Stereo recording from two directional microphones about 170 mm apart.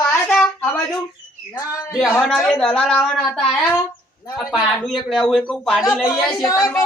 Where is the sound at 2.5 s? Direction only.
5° left (ahead or behind).